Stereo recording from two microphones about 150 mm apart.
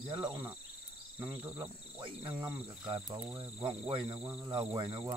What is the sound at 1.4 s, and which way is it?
Cricket, 15° right (ahead or behind).